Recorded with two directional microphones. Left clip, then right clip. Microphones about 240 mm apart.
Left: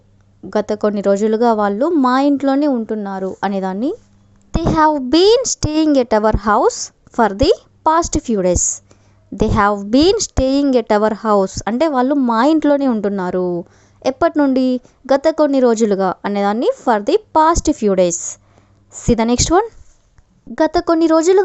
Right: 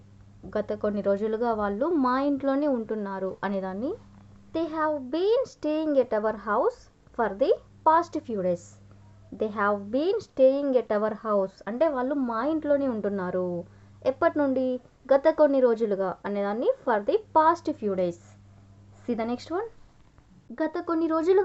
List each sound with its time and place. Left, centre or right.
0.5 s a woman's voice: left